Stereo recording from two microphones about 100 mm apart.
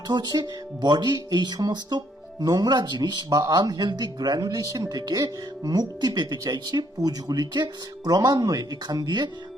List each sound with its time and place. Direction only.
0.1 s speech: 45° right (ahead or behind)